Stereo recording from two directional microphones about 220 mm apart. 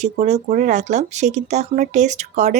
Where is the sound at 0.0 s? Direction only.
30° right (ahead or behind).